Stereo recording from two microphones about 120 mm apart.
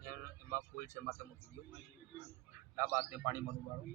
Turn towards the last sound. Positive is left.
turn(degrees=-15)  # may be behind; listen again after turning